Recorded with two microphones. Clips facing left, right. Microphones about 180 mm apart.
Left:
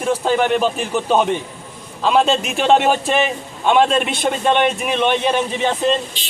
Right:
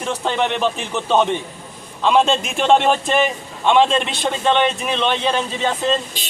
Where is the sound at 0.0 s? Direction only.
5° left (ahead or behind).